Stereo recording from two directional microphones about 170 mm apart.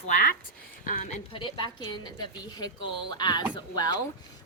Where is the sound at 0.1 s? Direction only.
50° left (ahead or behind).